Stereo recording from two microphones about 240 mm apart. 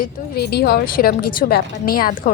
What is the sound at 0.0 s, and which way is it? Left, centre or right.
A woman's voice, left.